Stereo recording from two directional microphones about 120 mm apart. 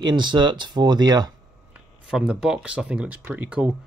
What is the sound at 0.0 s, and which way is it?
Speech, 40° right (ahead or behind).